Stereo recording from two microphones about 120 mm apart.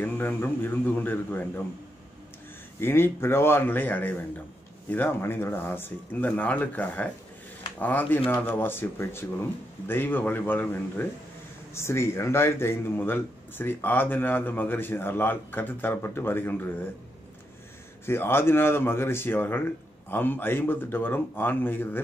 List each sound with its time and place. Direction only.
0.0 s speech: 15° left (ahead or behind)
2.8 s speech: 20° left (ahead or behind)
18.0 s speech: 20° left (ahead or behind)